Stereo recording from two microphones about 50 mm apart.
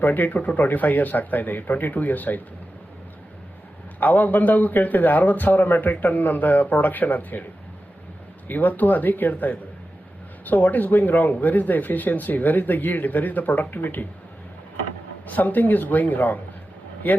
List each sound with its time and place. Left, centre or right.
0.0 s speech: left
4.0 s speech: left
8.4 s speech: left
15.3 s speech: left